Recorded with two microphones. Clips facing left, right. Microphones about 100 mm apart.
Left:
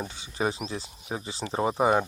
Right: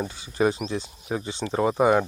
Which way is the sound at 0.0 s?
Centre (ahead or behind).